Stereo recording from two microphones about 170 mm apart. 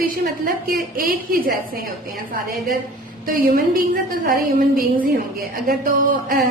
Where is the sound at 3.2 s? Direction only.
55° right (ahead or behind).